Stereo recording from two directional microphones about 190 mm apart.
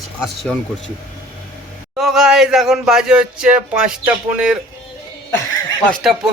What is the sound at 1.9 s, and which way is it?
Speech, centre (ahead or behind).